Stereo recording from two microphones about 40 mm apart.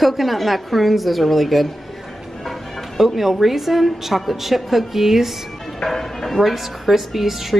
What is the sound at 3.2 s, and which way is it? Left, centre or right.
A woman's voice, centre.